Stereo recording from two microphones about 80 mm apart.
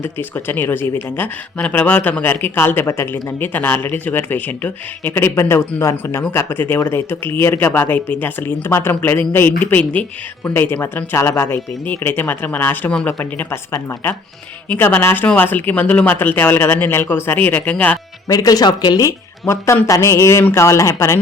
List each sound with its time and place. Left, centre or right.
0.0 s speech: left
18.3 s speech: left
19.0 s speech: left